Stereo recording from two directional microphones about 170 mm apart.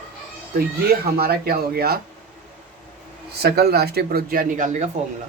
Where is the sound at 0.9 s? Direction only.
65° right (ahead or behind).